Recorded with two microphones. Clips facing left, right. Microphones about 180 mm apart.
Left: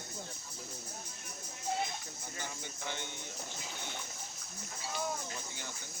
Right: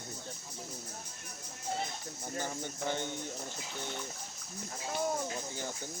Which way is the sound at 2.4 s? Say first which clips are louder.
Right 7 dB; 45° right (ahead or behind).